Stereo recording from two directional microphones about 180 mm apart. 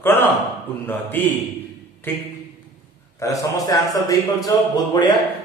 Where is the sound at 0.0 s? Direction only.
10° left (ahead or behind).